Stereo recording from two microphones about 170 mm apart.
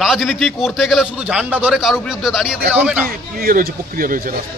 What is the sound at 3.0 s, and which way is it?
Speech, 60° right (ahead or behind).